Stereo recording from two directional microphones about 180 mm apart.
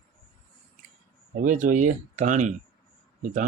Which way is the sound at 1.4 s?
45° right (ahead or behind).